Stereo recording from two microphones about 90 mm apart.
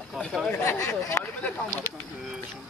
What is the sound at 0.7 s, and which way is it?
Speech, 35° left (ahead or behind).